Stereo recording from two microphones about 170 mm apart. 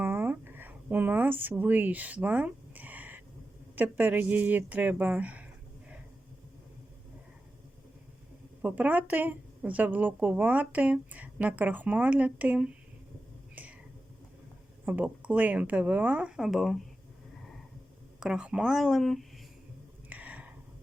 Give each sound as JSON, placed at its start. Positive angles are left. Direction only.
{"t": 0.0, "sound": "a sound", "side_deg": -10}
{"t": 3.8, "sound": "a woman's voice", "side_deg": -10}
{"t": 8.6, "sound": "a woman's voice", "side_deg": -10}
{"t": 13.6, "sound": "whispering", "side_deg": -10}
{"t": 14.8, "sound": "a woman's voice", "side_deg": -10}
{"t": 18.2, "sound": "speech", "side_deg": -5}
{"t": 20.1, "sound": "a sound", "side_deg": -10}